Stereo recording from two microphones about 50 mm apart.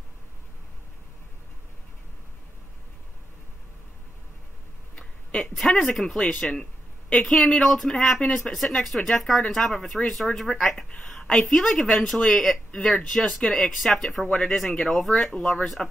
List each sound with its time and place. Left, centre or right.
4.9 s a sound: centre
5.6 s a woman's voice: centre
6.4 s a woman's voice: centre
14.2 s a woman's voice: centre